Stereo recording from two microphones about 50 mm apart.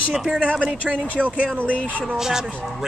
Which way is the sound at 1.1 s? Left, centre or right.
Right.